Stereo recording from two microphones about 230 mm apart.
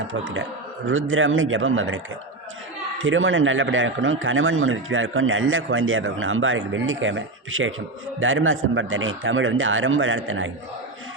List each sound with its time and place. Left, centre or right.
0.1 s a man's voice: right
3.0 s a man's voice: right